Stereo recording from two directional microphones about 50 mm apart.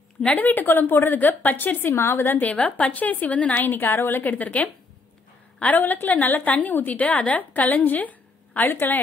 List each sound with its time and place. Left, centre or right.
0.2 s a woman's voice: left
2.0 s a woman's voice: left
2.4 s a woman's voice: left
3.6 s a woman's voice: left
8.6 s a woman's voice: left